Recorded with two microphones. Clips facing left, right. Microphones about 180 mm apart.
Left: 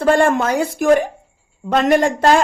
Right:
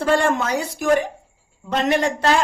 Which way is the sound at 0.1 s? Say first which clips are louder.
Left 5 dB; 50° left (ahead or behind).